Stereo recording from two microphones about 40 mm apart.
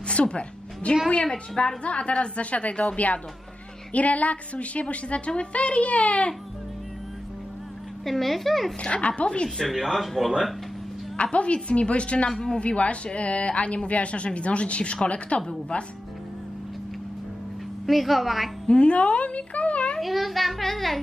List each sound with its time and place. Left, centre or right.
0.1 s a woman's voice: left
1.8 s a woman's voice: left
3.9 s a woman's voice: left
8.0 s a child's voice: centre
8.8 s a woman's voice: left
9.7 s a child's voice: centre
11.3 s a woman's voice: left
17.8 s a child's voice: centre
18.7 s a woman's voice: left
20.0 s a child's voice: centre